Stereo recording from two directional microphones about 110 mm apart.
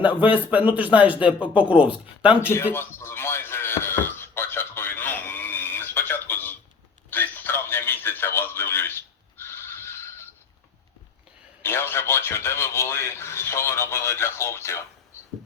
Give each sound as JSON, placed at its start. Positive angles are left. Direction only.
{"t": 0.0, "sound": "speech", "side_deg": -15}
{"t": 2.7, "sound": "a sound", "side_deg": 20}
{"t": 11.6, "sound": "speech", "side_deg": 20}